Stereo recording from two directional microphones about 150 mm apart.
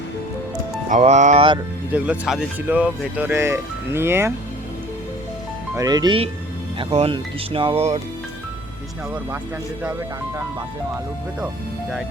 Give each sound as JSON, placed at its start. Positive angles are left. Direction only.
{"t": 0.9, "sound": "speech", "side_deg": -50}
{"t": 1.9, "sound": "speech", "side_deg": -10}
{"t": 5.7, "sound": "speech", "side_deg": -25}